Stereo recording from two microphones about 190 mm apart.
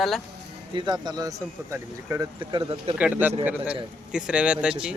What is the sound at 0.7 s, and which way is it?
Speech, 20° right (ahead or behind).